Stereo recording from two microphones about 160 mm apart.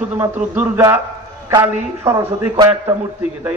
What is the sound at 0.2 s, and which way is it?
A man's voice, 15° right (ahead or behind).